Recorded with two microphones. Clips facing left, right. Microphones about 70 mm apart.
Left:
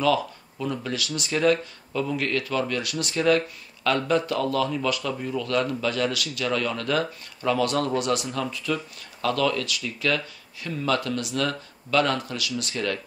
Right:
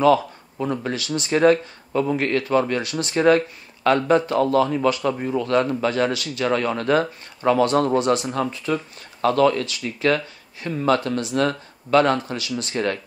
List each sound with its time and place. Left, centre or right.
0.0 s a man's voice: right